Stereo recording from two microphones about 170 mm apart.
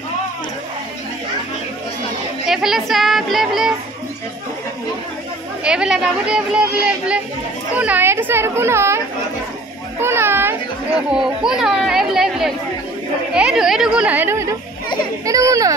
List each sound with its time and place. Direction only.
2.4 s speech: centre (ahead or behind)
5.6 s a child's voice: 5° right (ahead or behind)